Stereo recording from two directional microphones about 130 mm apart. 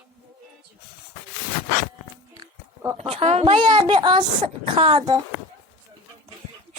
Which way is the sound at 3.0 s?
50° right (ahead or behind).